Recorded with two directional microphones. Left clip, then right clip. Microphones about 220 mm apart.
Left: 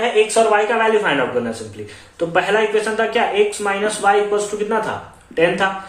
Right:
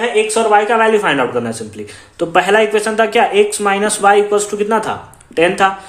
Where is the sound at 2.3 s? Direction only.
50° right (ahead or behind).